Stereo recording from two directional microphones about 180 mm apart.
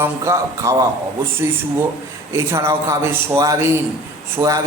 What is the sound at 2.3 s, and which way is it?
A man's voice, 15° right (ahead or behind).